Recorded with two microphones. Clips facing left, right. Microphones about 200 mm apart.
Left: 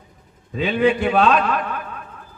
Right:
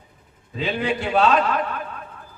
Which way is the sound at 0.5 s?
55° left (ahead or behind).